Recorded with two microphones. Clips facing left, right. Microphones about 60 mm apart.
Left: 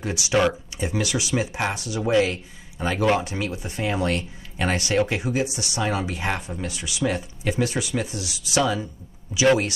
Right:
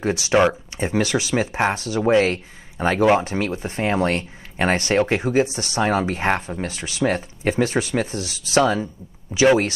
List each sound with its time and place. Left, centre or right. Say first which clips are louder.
0.0 s speech: right 4 dB; right
8.1 s speech: right 3 dB; centre
8.5 s speech: right 5 dB; right